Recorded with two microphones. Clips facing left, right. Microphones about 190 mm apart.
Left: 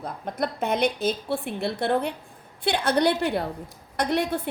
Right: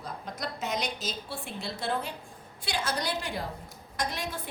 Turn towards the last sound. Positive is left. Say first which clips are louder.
# left 10 dB
turn(degrees=65)  # may be behind; listen again after turning